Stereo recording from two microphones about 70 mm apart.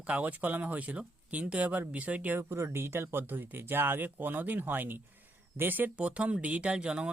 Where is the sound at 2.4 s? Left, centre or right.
Right.